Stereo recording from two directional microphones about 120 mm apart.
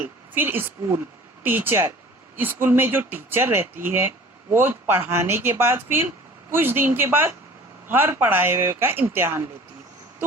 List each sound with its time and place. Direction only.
0.0 s a woman's voice: 15° right (ahead or behind)